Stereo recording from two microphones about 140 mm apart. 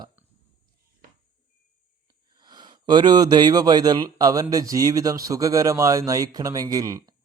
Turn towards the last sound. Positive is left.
turn(degrees=-25)  # may be behind; listen again after turning